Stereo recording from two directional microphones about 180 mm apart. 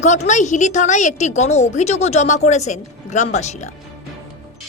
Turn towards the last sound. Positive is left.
turn(degrees=40)  # may be behind; listen again after turning